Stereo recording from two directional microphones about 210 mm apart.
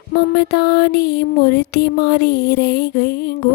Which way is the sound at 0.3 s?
50° left (ahead or behind).